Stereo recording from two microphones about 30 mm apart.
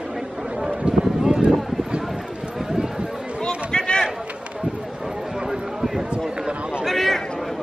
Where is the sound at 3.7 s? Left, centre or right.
Left.